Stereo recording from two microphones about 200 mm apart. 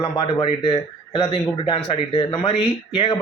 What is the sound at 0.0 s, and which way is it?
Speech, 25° left (ahead or behind).